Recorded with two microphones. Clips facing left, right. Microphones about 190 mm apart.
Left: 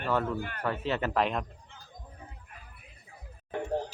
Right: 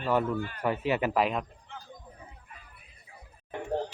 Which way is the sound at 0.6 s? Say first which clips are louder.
Right 3 dB; 15° right (ahead or behind).